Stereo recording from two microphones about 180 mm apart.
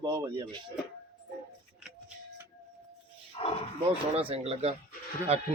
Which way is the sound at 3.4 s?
35° left (ahead or behind).